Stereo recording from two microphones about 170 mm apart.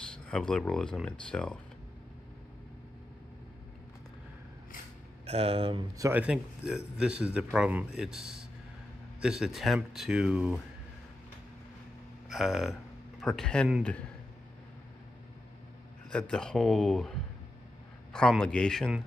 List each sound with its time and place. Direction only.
0.1 s speech: 5° left (ahead or behind)
5.2 s speech: 35° right (ahead or behind)
6.0 s speech: 10° right (ahead or behind)
12.3 s speech: centre (ahead or behind)
16.1 s speech: 5° left (ahead or behind)